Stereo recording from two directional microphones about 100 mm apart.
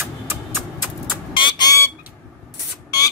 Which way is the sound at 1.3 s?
50° left (ahead or behind).